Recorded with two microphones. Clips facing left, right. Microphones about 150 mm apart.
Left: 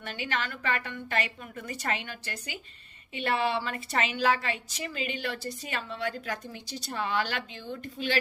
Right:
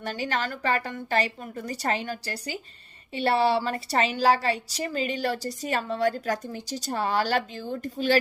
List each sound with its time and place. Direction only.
0.0 s a woman's voice: 40° right (ahead or behind)